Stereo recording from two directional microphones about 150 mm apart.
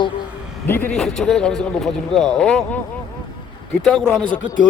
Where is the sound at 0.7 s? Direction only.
10° left (ahead or behind).